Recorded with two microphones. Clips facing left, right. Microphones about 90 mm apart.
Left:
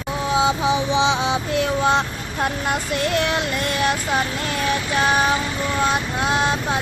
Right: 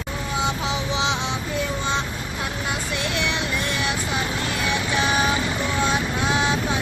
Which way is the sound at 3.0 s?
45° left (ahead or behind).